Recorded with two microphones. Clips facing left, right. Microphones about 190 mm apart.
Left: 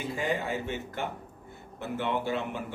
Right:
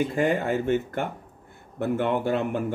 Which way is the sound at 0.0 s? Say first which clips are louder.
Right 7 dB; 55° right (ahead or behind).